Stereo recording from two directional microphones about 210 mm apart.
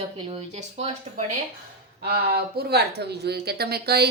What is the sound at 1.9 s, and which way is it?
Speech, 45° right (ahead or behind).